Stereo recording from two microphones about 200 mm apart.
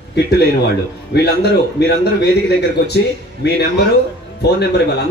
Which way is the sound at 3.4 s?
55° left (ahead or behind).